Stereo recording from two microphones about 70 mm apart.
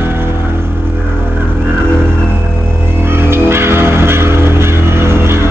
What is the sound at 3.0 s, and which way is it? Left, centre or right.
Music, right.